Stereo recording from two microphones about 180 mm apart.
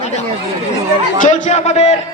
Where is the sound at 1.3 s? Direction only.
40° left (ahead or behind).